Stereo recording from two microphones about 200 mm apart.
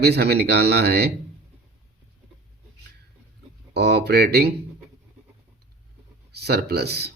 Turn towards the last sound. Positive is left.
turn(degrees=-55)  # may be behind; listen again after turning